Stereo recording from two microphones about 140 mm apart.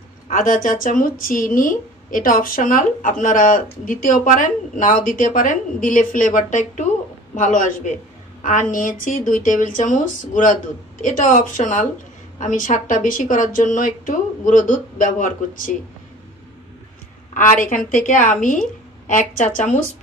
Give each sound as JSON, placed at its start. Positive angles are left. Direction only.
{"t": 0.3, "sound": "a woman's voice", "side_deg": 70}
{"t": 17.3, "sound": "a woman's voice", "side_deg": 65}